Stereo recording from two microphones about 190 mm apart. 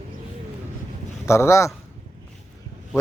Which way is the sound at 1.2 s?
15° left (ahead or behind).